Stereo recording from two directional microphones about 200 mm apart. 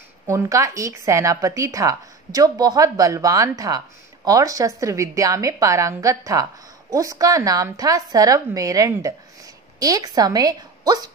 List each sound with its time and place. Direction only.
0.3 s a woman's voice: 15° right (ahead or behind)